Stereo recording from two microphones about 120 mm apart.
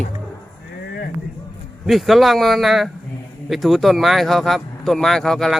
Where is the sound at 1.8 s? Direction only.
Centre (ahead or behind).